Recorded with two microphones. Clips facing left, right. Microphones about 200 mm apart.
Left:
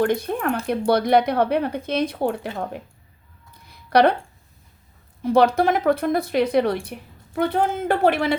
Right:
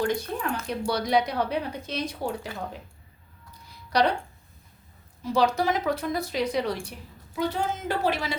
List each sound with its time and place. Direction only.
0.0 s speech: 55° left (ahead or behind)
3.8 s speech: 60° left (ahead or behind)
5.2 s speech: 55° left (ahead or behind)